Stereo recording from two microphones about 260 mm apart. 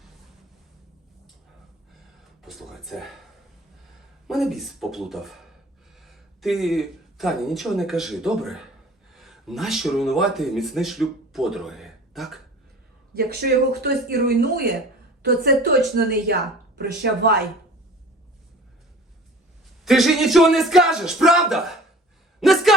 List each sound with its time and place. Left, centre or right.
2.4 s speech: centre
4.3 s speech: centre
13.1 s speech: right
19.8 s speech: centre
22.4 s a sound: centre